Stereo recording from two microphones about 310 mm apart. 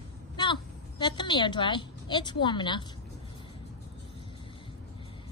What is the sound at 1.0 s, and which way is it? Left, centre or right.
A woman's voice, centre.